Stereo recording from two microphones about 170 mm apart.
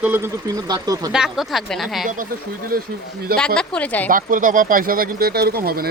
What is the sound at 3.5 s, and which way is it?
Speech, 5° left (ahead or behind).